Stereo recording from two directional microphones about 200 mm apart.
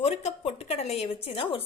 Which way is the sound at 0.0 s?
30° left (ahead or behind).